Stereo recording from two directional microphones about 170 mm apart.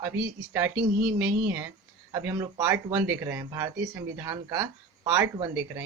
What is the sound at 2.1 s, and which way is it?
Speech, 20° right (ahead or behind).